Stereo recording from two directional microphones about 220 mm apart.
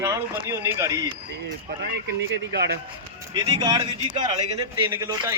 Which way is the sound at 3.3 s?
20° right (ahead or behind).